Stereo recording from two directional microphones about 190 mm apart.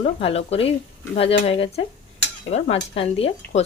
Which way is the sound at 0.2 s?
30° left (ahead or behind).